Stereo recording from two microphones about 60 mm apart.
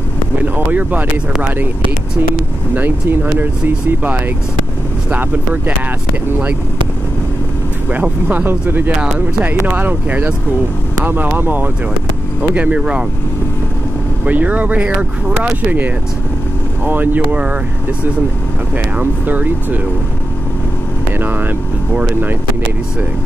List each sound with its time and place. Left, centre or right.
0.4 s speech: right
2.7 s speech: right
7.9 s speech: right
11.3 s speech: right
12.5 s speech: centre
14.2 s speech: right
16.8 s speech: right
18.9 s speech: right
21.2 s speech: right